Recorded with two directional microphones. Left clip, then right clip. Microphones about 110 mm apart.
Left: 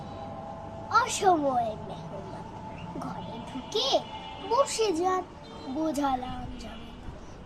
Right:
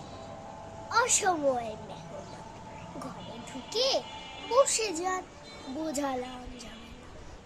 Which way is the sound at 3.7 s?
20° right (ahead or behind).